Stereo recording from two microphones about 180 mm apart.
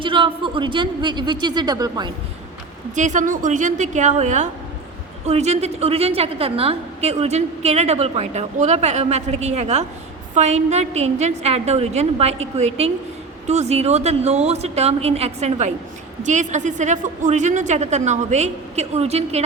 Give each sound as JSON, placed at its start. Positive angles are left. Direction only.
{"t": 0.0, "sound": "speech", "side_deg": -30}
{"t": 2.9, "sound": "a woman's voice", "side_deg": -45}